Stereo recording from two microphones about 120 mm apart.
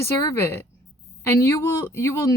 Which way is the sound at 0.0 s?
20° left (ahead or behind).